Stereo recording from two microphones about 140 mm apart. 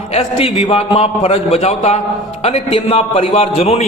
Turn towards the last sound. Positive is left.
turn(degrees=45)  # may be behind; listen again after turning